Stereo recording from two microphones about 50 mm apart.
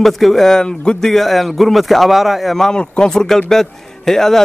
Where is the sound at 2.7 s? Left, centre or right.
Centre.